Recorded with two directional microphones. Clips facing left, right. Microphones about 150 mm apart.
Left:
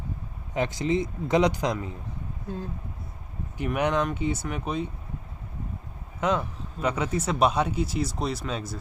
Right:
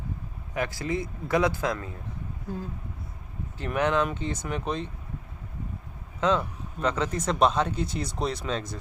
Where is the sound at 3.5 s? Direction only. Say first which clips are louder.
Even; 15° left (ahead or behind).